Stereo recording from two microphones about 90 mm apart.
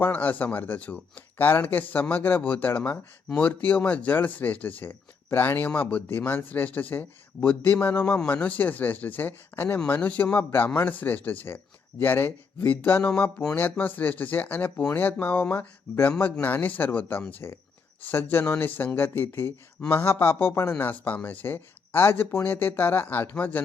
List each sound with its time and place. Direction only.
0.0 s speech: 20° left (ahead or behind)